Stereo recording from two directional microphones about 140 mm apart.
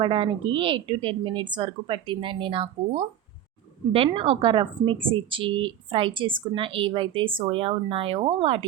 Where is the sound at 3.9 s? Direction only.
40° right (ahead or behind).